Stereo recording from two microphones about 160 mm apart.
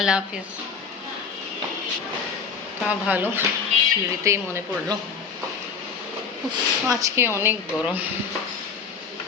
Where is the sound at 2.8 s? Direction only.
10° right (ahead or behind).